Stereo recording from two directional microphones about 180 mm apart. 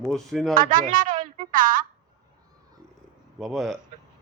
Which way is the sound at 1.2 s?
50° right (ahead or behind).